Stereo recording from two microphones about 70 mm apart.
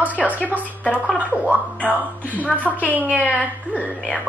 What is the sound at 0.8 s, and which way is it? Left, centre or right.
Speech, left.